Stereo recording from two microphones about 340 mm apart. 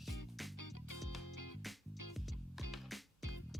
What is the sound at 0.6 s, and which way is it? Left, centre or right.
Music, left.